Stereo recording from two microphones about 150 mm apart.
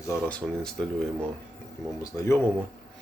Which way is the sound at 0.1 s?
10° left (ahead or behind).